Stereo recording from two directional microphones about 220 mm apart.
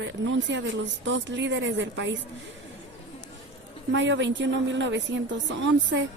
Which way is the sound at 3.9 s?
55° right (ahead or behind).